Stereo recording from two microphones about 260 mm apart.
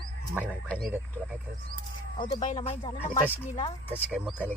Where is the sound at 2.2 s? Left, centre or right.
Left.